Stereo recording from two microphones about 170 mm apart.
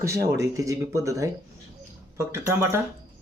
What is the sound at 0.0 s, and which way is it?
Speech, 15° right (ahead or behind).